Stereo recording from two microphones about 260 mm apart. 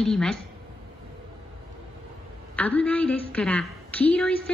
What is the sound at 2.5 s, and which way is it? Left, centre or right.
A woman's voice, centre.